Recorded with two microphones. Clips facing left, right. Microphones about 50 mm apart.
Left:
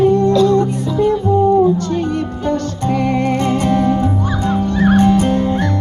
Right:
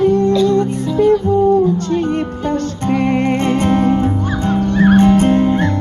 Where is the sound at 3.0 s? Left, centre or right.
Right.